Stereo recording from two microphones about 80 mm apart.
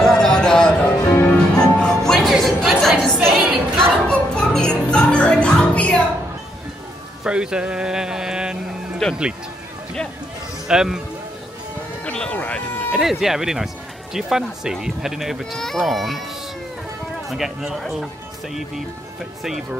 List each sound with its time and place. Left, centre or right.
0.0 s music: centre
1.0 s music: left
1.3 s music: centre
7.2 s speech: centre
10.7 s speech: centre
12.0 s speech: centre
12.9 s speech: centre
17.3 s speech: centre